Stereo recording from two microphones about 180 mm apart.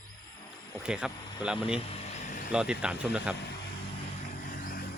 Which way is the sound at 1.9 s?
40° left (ahead or behind).